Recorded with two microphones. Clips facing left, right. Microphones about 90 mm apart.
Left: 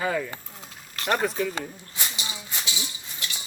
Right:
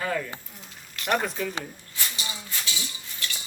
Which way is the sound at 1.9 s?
20° left (ahead or behind).